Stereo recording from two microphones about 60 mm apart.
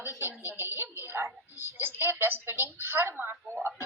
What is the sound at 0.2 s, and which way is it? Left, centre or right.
A woman's voice, right.